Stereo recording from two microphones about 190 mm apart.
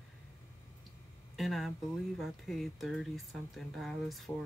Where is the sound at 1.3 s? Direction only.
Centre (ahead or behind).